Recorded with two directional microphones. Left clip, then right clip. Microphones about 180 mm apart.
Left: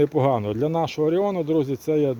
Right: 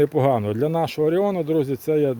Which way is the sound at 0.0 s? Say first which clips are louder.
Right 1 dB; 25° right (ahead or behind).